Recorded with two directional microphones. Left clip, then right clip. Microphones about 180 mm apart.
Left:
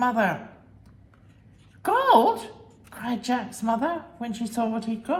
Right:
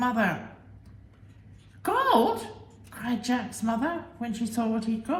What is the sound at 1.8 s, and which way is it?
A woman's voice, 30° left (ahead or behind).